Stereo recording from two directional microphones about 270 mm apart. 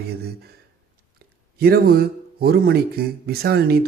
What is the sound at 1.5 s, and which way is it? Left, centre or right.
Speech, right.